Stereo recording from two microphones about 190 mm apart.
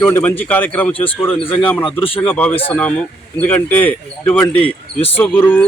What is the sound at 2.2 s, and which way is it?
Speech, 10° left (ahead or behind).